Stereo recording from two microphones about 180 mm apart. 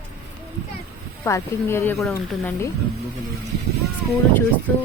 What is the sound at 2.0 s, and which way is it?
Speech, centre (ahead or behind).